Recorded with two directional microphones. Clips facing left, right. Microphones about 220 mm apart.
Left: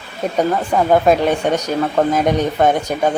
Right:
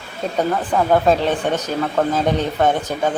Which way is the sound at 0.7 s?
15° left (ahead or behind).